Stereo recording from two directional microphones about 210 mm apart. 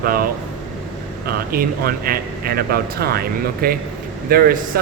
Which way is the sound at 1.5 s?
45° right (ahead or behind).